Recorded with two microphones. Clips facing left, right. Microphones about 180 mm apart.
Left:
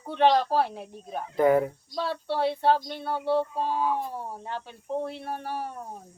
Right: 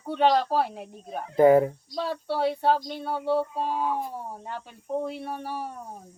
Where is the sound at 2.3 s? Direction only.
10° right (ahead or behind).